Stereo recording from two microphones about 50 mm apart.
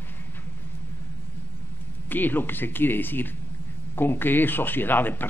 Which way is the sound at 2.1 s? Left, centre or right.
Left.